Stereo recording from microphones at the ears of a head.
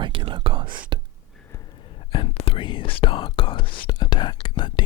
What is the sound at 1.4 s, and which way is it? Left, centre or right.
Speech, left.